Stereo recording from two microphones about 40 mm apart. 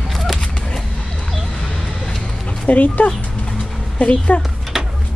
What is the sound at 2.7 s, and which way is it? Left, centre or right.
A woman's voice, left.